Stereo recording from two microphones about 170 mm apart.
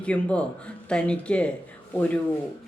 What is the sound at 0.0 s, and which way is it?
A woman's voice, 5° left (ahead or behind).